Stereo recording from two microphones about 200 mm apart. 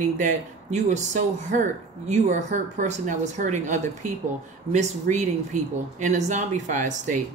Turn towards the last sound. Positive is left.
turn(degrees=-40)  # may be behind; listen again after turning